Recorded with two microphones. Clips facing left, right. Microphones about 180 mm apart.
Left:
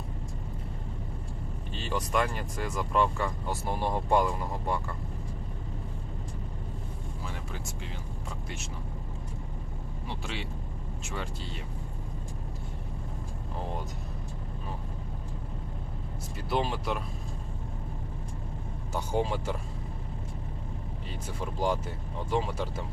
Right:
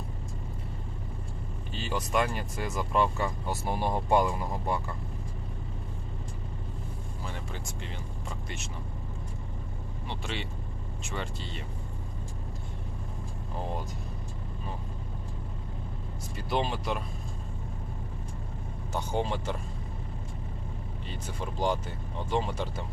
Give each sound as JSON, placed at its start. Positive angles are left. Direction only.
{"t": 2.1, "sound": "speech", "side_deg": -20}
{"t": 3.2, "sound": "speech", "side_deg": -10}
{"t": 10.1, "sound": "speech", "side_deg": 5}
{"t": 16.5, "sound": "speech", "side_deg": 5}
{"t": 18.9, "sound": "speech", "side_deg": 5}
{"t": 21.4, "sound": "speech", "side_deg": 5}